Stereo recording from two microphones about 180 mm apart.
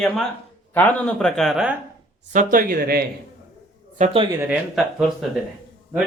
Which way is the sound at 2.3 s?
50° right (ahead or behind).